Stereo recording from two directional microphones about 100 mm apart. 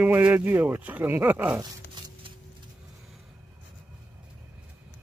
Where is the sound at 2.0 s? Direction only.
50° right (ahead or behind).